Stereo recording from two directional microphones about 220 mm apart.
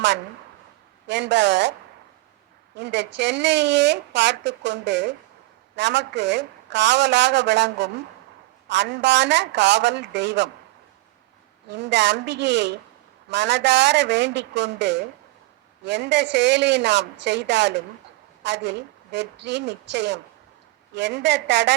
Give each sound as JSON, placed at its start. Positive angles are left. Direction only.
{"t": 1.0, "sound": "a woman's voice", "side_deg": -55}
{"t": 2.7, "sound": "a woman's voice", "side_deg": -50}
{"t": 11.7, "sound": "a woman's voice", "side_deg": -50}